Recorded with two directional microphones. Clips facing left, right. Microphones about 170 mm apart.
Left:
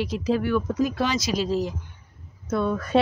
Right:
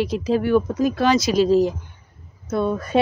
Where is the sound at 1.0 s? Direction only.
55° right (ahead or behind).